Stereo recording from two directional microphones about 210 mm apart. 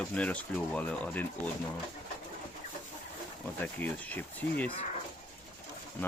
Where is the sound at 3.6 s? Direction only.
10° left (ahead or behind).